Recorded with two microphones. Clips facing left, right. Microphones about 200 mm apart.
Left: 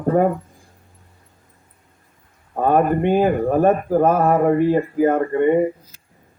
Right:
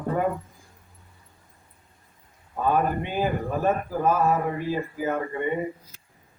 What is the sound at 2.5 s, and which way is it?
Speech, 55° left (ahead or behind).